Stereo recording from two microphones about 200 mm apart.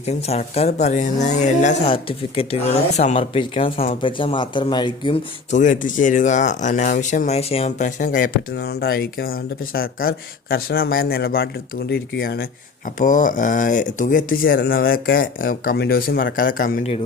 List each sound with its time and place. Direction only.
0.0 s speech: 30° left (ahead or behind)